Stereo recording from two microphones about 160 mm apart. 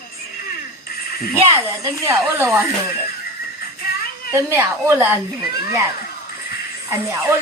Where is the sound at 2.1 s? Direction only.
15° right (ahead or behind).